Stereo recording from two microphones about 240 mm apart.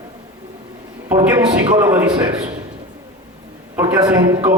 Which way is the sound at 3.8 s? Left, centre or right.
Centre.